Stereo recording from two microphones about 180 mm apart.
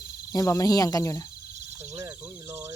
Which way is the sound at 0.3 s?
15° left (ahead or behind).